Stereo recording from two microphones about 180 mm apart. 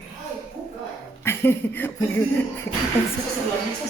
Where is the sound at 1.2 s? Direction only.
15° left (ahead or behind).